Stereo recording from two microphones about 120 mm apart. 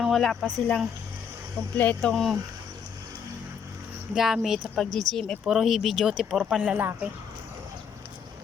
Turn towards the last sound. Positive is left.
turn(degrees=-15)  # may be behind; listen again after turning